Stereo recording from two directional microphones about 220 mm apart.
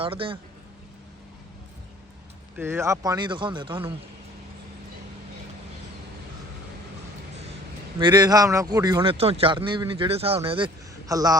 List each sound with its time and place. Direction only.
0.0 s a man's voice: 25° right (ahead or behind)
2.6 s a man's voice: 10° right (ahead or behind)
7.9 s a man's voice: 20° right (ahead or behind)